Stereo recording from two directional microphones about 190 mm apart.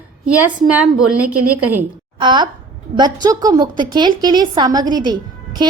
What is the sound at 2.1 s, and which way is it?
A woman's voice, 25° right (ahead or behind).